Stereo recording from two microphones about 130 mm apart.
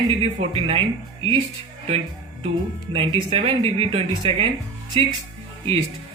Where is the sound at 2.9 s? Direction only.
45° right (ahead or behind).